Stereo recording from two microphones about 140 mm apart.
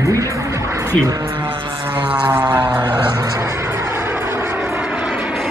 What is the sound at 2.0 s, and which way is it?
Aircraft, 10° right (ahead or behind).